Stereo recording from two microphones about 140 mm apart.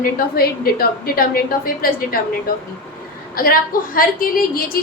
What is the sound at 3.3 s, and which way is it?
A woman's voice, 90° left.